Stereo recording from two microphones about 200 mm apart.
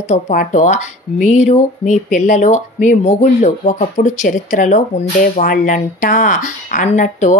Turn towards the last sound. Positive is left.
turn(degrees=35)  # may be behind; listen again after turning